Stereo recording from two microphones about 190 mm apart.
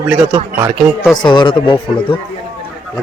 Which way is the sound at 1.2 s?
25° left (ahead or behind).